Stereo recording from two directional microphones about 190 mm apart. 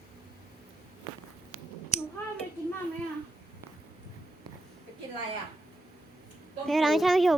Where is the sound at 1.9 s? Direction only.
35° left (ahead or behind).